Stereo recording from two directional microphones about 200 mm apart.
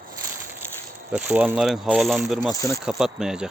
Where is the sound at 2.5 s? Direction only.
15° left (ahead or behind).